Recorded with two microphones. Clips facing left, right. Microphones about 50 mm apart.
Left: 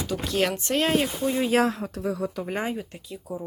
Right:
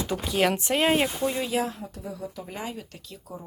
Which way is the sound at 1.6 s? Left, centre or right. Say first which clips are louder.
Left 8 dB; left.